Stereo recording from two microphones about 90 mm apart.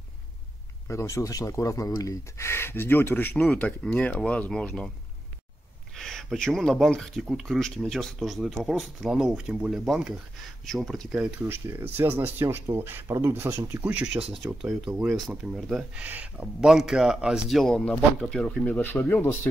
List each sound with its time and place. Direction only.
0.8 s speech: 35° left (ahead or behind); by 4.8 s 10° left (ahead or behind)
5.9 s speech: 5° left (ahead or behind)
11.1 s speech: 10° right (ahead or behind)
11.4 s speech: 25° right (ahead or behind)
14.3 s speech: centre (ahead or behind)
16.0 s speech: 20° right (ahead or behind)
16.6 s speech: 5° right (ahead or behind); by 19.2 s 20° left (ahead or behind)